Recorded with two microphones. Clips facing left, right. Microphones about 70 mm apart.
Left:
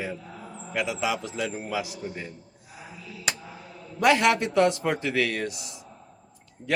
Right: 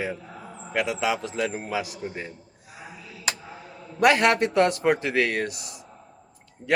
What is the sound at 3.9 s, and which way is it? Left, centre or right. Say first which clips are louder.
Speech: right 2 dB; right.